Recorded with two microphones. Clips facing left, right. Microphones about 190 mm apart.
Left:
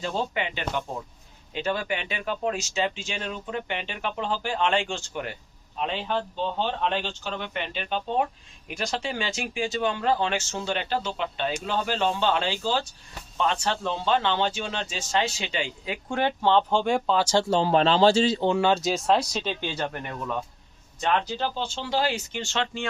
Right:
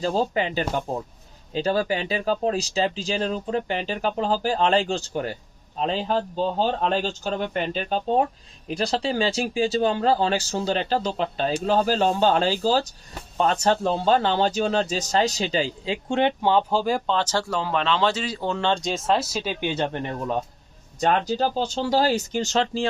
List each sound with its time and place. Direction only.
0.0 s speech: 35° right (ahead or behind)
16.5 s speech: 10° right (ahead or behind)
17.3 s speech: 30° left (ahead or behind)
18.5 s speech: 5° left (ahead or behind); by 22.9 s 35° right (ahead or behind)